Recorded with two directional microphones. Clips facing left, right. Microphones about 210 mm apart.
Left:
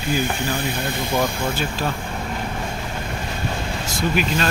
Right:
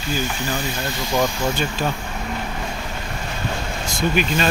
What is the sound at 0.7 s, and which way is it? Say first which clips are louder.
Speech: even; 55° left (ahead or behind).